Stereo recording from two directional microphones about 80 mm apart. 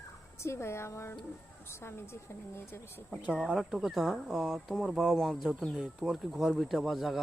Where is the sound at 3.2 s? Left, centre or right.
Centre.